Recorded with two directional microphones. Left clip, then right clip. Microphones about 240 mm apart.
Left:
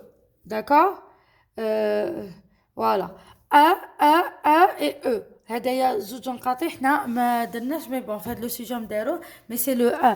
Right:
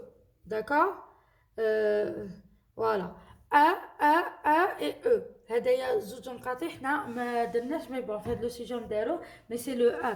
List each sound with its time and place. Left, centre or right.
0.4 s speech: left
1.5 s a sound: left
2.7 s speech: left